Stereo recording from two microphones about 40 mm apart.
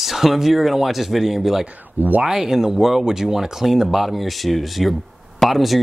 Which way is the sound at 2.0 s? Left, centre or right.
Right.